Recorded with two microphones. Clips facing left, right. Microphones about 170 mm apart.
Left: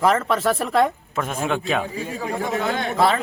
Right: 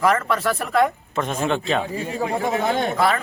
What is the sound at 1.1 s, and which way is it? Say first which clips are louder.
Speech: right 1 dB; 5° left (ahead or behind).